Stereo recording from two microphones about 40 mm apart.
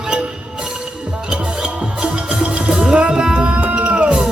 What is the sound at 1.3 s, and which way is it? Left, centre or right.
Music, right.